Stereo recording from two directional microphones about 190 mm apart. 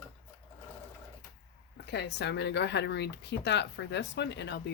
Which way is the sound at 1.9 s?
65° left (ahead or behind).